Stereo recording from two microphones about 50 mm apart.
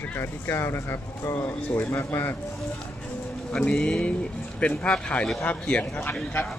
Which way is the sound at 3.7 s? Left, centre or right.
Centre.